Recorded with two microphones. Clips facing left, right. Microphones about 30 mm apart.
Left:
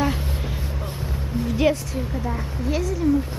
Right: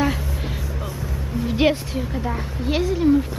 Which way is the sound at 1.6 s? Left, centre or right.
Right.